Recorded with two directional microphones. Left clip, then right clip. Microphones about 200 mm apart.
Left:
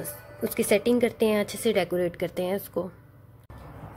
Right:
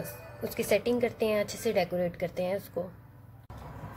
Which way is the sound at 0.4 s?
30° left (ahead or behind).